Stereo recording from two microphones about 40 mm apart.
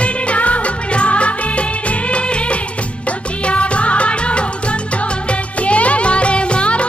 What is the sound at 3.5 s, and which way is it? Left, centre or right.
Music, left.